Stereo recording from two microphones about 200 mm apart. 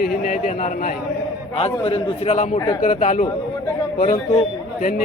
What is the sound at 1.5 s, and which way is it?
Speech, 30° left (ahead or behind).